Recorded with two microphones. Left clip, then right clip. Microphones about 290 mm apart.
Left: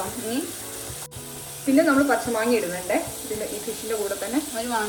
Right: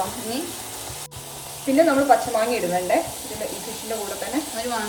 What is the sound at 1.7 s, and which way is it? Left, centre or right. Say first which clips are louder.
Speech: right 3 dB; left.